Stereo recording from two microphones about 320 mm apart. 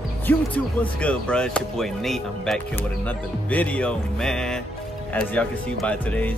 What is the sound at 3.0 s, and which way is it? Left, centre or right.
Speech, centre.